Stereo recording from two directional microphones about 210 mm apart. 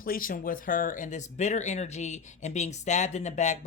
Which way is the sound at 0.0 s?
40° left (ahead or behind).